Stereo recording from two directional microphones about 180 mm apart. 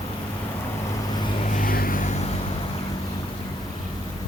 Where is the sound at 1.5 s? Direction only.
50° left (ahead or behind).